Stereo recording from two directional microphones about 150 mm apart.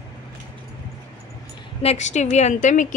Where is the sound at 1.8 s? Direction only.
45° left (ahead or behind).